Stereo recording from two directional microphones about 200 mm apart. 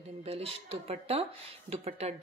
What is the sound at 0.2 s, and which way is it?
Speech, 30° right (ahead or behind).